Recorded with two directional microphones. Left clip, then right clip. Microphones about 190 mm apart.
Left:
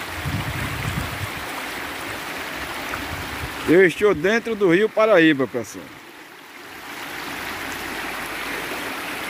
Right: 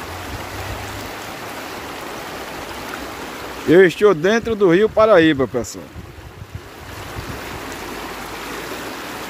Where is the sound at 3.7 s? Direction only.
5° right (ahead or behind).